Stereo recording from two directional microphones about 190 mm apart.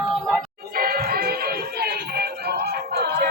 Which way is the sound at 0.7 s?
50° right (ahead or behind).